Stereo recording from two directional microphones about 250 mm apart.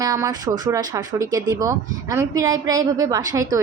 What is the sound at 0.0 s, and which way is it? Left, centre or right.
Speech, centre.